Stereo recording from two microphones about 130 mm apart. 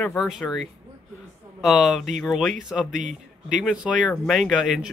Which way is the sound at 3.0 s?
75° right (ahead or behind).